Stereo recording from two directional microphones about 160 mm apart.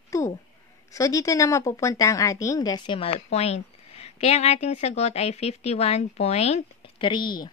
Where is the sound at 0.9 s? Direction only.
20° left (ahead or behind).